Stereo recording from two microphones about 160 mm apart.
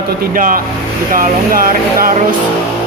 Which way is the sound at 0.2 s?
60° right (ahead or behind).